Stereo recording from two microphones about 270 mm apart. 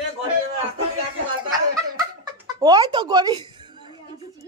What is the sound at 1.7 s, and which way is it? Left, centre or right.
Chuckle, centre.